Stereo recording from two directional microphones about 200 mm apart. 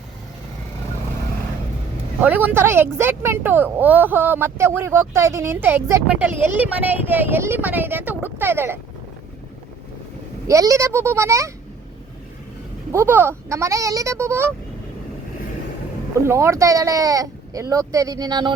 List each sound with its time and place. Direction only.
2.2 s speech: 10° right (ahead or behind)
10.4 s speech: 15° right (ahead or behind)
12.9 s speech: 10° right (ahead or behind)
16.2 s speech: 15° right (ahead or behind)